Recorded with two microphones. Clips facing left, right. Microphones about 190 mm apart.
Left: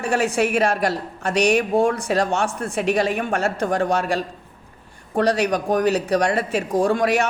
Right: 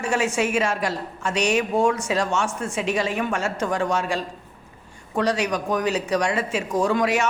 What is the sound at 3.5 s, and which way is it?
Speech, 35° left (ahead or behind).